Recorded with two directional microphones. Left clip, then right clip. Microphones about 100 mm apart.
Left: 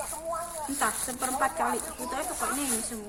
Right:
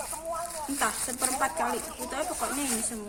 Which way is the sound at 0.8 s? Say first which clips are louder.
Even; 30° right (ahead or behind).